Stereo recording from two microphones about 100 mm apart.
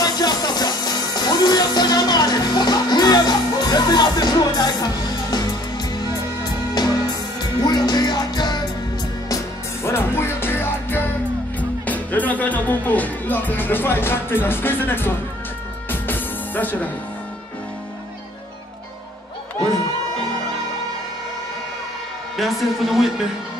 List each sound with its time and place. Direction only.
0.0 s music: 40° left (ahead or behind)
9.8 s music: 25° left (ahead or behind)
22.4 s a woman's voice: centre (ahead or behind)